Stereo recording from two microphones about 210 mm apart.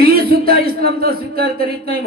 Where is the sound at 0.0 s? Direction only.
45° right (ahead or behind).